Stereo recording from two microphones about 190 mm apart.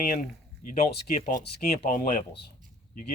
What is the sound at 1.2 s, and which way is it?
Speech, 45° left (ahead or behind).